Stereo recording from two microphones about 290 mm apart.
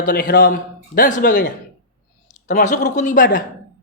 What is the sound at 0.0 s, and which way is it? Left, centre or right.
A man's voice, left.